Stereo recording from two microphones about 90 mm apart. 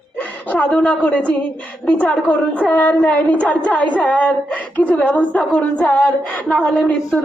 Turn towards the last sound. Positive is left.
turn(degrees=10)  # may be behind; listen again after turning